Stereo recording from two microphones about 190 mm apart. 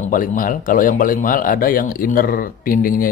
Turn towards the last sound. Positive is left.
turn(degrees=45)  # may be behind; listen again after turning